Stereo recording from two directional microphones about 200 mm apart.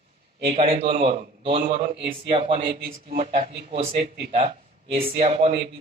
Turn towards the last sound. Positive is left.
turn(degrees=-30)  # may be behind; listen again after turning